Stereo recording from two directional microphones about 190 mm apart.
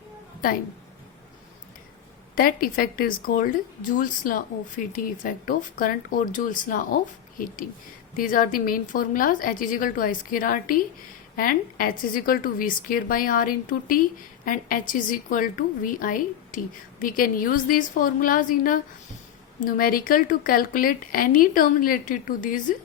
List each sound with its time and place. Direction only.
2.3 s speech: 50° left (ahead or behind)